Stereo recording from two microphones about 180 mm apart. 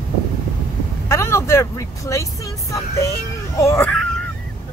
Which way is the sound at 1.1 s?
15° left (ahead or behind).